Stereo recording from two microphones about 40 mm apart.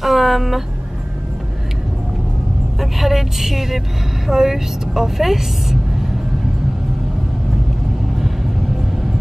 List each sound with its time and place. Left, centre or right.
0.0 s speech: centre
2.8 s a woman's voice: centre